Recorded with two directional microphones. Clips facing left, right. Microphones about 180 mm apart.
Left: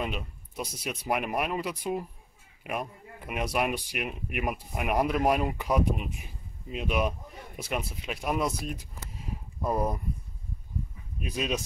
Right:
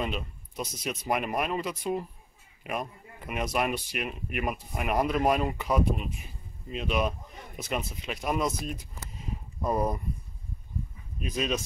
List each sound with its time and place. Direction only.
0.0 s speech: 5° left (ahead or behind)
9.6 s speech: centre (ahead or behind)
11.1 s speech: 10° left (ahead or behind)